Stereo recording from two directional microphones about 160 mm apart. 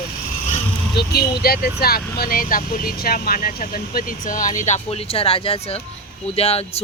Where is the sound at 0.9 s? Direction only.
75° left (ahead or behind).